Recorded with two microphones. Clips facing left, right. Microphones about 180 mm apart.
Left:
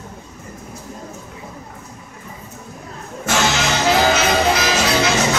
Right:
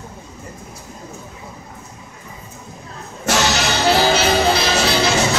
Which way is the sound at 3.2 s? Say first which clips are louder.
Even; 35° right (ahead or behind).